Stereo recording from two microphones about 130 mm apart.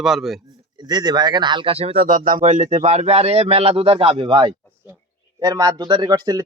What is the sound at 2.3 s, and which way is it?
A man's voice, 80° right.